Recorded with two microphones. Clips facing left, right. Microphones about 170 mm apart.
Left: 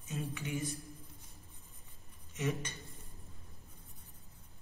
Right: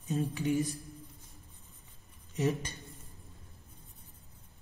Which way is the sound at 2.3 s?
35° right (ahead or behind).